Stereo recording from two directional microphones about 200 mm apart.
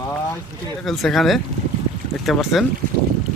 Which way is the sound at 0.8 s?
Centre (ahead or behind).